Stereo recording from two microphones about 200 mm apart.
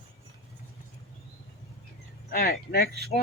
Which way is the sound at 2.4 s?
50° left (ahead or behind).